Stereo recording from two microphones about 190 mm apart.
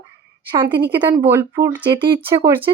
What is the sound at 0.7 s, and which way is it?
Speech, 60° right (ahead or behind).